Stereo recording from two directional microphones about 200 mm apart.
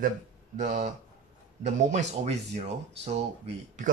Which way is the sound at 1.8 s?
35° right (ahead or behind).